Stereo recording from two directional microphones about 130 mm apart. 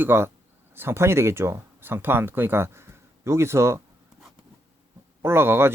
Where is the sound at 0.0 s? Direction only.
15° right (ahead or behind).